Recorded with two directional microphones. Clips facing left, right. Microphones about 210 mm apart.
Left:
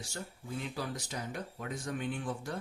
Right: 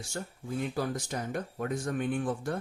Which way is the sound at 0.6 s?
50° right (ahead or behind).